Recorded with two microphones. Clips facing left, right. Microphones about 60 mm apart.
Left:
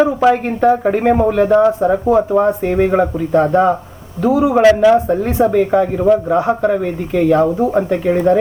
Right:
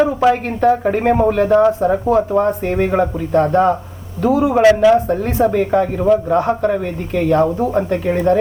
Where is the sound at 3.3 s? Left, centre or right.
Centre.